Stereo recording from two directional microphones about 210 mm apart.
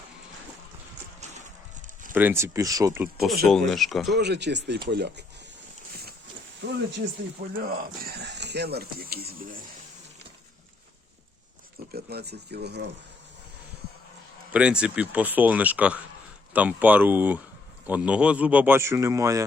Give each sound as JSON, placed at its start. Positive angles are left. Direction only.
{"t": 2.1, "sound": "a man's voice", "side_deg": -10}
{"t": 3.4, "sound": "speech", "side_deg": 0}
{"t": 4.1, "sound": "speech", "side_deg": -55}
{"t": 6.6, "sound": "speech", "side_deg": -55}
{"t": 11.9, "sound": "speech", "side_deg": -50}
{"t": 14.5, "sound": "a man's voice", "side_deg": -5}